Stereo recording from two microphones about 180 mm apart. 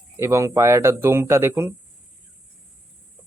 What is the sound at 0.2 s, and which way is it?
Speech, 15° right (ahead or behind).